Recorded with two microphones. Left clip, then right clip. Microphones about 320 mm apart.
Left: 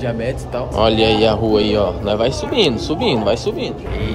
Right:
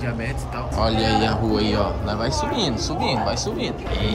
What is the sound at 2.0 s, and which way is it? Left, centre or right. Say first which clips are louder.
Speech: left 8 dB; left.